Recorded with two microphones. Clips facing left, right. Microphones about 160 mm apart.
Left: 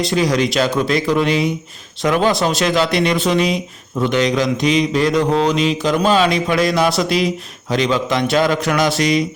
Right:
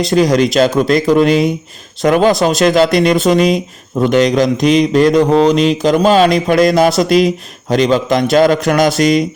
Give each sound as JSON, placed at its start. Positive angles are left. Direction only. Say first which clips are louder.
{"t": 0.0, "sound": "speech", "louder": "right 5 dB", "side_deg": -40}